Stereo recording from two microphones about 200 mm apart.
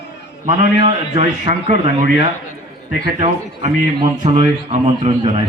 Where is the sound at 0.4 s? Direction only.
35° right (ahead or behind).